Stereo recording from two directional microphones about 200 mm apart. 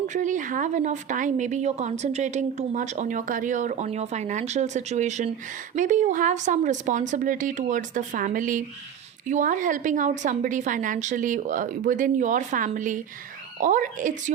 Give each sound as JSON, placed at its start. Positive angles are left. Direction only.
{"t": 0.1, "sound": "speech", "side_deg": -40}